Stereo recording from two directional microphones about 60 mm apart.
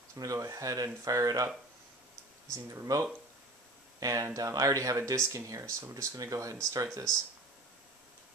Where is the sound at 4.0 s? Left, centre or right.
Right.